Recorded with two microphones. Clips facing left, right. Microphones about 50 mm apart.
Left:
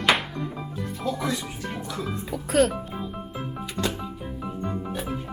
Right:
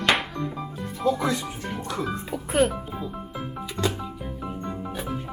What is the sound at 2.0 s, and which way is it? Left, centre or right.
Speech, centre.